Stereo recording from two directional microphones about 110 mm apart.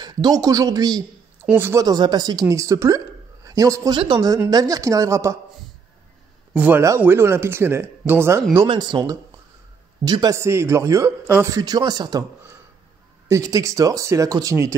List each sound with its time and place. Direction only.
0.0 s speech: 40° right (ahead or behind)
1.4 s speech: 15° right (ahead or behind)
1.8 s speech: 40° right (ahead or behind)
2.4 s a man's voice: 30° right (ahead or behind)
3.9 s speech: 45° right (ahead or behind)
4.5 s speech: 35° right (ahead or behind)
6.5 s speech: 15° right (ahead or behind)
8.6 s speech: 40° right (ahead or behind)
10.3 s speech: 25° right (ahead or behind)
11.5 s speech: 40° right (ahead or behind)
13.3 s speech: 30° right (ahead or behind)